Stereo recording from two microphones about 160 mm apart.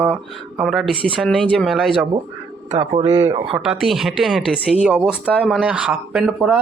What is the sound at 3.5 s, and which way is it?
A man's voice, centre (ahead or behind).